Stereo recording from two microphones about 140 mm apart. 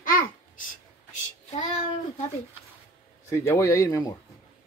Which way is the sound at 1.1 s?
60° left (ahead or behind).